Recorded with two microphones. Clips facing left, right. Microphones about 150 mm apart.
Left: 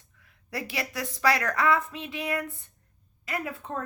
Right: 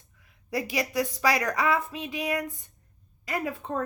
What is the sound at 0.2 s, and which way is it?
A woman's voice, 15° right (ahead or behind).